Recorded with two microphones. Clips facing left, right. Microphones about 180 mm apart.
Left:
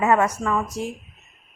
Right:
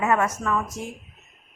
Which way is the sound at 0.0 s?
30° left (ahead or behind).